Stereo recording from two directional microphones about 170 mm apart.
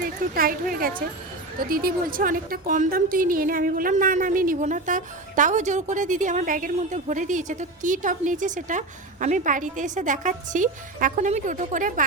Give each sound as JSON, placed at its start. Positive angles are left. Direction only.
{"t": 0.0, "sound": "a woman's voice", "side_deg": -60}